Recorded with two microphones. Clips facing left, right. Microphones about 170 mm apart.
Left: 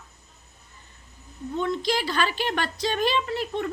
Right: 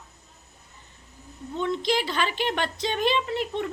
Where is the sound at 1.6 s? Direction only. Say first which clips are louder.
Right 1 dB; 20° right (ahead or behind).